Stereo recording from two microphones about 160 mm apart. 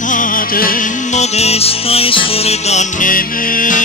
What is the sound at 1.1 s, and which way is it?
Music, 40° left (ahead or behind).